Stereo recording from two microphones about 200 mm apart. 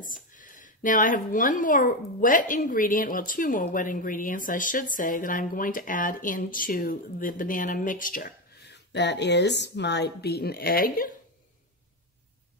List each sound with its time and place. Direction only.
0.0 s a woman's voice: 40° left (ahead or behind)